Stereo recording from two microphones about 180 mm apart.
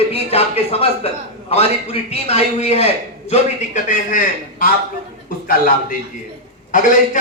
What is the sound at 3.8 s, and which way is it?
Speech, 45° left (ahead or behind).